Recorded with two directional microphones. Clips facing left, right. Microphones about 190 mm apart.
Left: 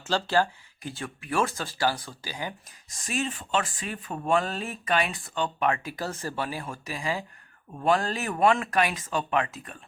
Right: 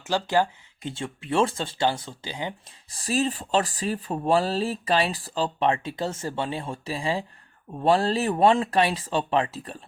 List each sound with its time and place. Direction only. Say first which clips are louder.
0.0 s speech: right 2 dB; 15° right (ahead or behind)